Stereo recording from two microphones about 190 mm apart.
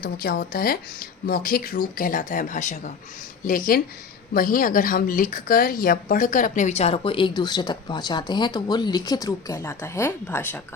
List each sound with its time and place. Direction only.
0.0 s a woman's voice: 50° left (ahead or behind); by 10.6 s 10° left (ahead or behind)